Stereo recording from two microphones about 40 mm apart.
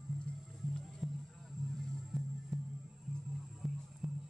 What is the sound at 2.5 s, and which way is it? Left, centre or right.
Music, centre.